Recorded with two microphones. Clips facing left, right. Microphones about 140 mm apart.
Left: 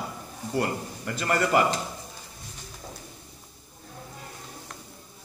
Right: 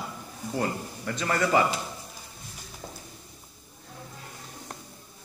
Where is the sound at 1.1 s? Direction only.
5° left (ahead or behind).